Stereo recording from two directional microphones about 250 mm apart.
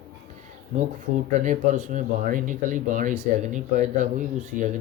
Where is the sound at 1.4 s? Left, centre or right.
Right.